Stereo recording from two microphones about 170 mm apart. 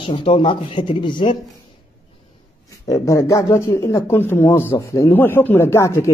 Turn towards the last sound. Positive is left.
turn(degrees=15)  # may be behind; listen again after turning